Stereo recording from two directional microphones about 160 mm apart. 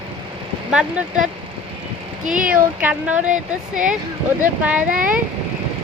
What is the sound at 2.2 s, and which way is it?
Speech, 55° right (ahead or behind).